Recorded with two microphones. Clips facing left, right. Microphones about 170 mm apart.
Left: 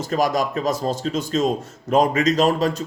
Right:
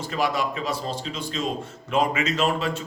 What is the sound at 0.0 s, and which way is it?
A man's voice, 40° left (ahead or behind).